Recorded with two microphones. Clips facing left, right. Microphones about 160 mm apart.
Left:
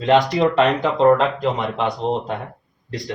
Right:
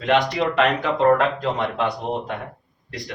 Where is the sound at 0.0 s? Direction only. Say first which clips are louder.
Left 4 dB; 30° left (ahead or behind).